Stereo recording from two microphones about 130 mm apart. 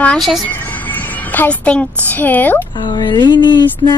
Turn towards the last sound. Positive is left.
turn(degrees=35)  # may be behind; listen again after turning